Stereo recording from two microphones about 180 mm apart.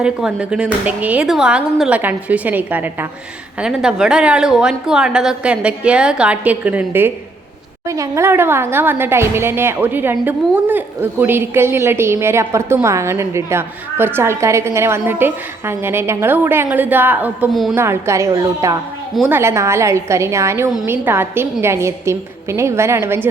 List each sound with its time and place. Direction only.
0.0 s a woman's voice: 5° right (ahead or behind)
17.7 s a woman's voice: 15° right (ahead or behind)